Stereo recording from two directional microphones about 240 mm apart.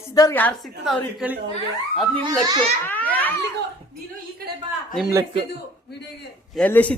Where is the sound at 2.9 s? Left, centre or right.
Centre.